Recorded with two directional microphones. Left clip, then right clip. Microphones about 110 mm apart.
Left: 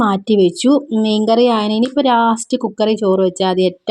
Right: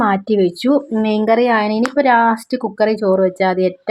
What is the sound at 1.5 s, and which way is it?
Speech, 45° left (ahead or behind).